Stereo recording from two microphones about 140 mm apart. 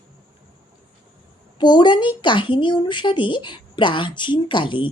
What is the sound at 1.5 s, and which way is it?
A woman's voice, 30° left (ahead or behind).